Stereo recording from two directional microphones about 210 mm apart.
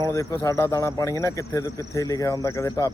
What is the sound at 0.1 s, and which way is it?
Speech, 15° left (ahead or behind).